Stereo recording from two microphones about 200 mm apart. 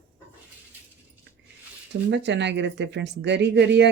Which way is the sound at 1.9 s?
60° right (ahead or behind).